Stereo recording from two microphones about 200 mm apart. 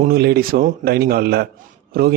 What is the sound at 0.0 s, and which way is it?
A man's voice, 50° right (ahead or behind).